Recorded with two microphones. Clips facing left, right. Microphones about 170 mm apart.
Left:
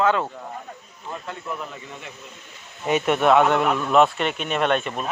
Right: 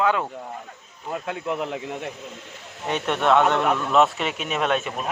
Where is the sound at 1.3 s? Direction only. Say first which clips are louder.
Right 7 dB; 80° right.